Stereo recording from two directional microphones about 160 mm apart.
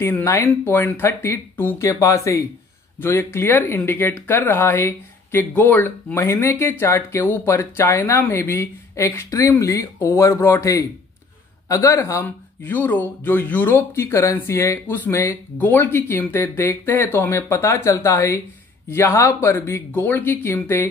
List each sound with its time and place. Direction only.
0.0 s speech: 15° left (ahead or behind)